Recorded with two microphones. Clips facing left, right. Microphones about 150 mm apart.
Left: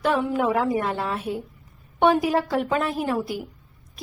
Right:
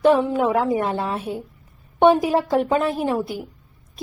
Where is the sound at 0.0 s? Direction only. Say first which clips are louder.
Right 5 dB; 25° right (ahead or behind).